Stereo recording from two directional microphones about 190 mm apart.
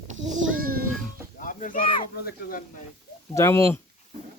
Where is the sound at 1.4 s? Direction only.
45° left (ahead or behind).